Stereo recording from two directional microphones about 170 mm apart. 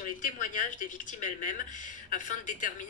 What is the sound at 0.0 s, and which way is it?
A woman's voice, 50° left (ahead or behind).